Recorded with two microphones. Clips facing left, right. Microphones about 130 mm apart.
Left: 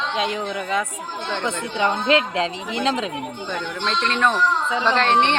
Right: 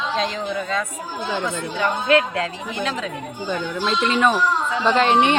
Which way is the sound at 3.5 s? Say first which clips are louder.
Right 4 dB; 5° right (ahead or behind).